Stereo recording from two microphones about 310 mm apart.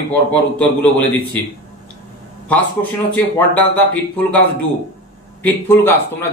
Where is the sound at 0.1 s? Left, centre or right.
Centre.